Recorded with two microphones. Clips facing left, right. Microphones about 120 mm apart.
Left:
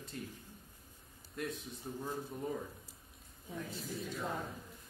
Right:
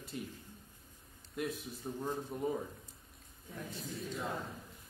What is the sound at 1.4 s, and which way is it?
A man's voice, 5° right (ahead or behind).